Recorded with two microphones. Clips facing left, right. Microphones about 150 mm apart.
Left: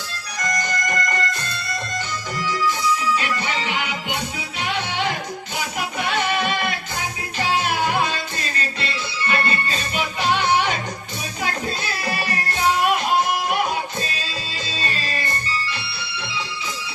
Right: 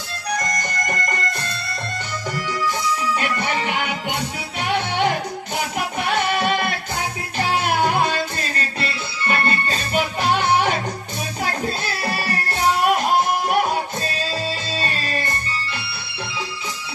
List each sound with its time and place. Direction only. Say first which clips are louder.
3.2 s music: right 2 dB; 55° right (ahead or behind)
9.2 s music: right 2 dB; 45° right (ahead or behind)